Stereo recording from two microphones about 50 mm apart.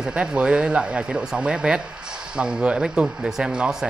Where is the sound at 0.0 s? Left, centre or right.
Centre.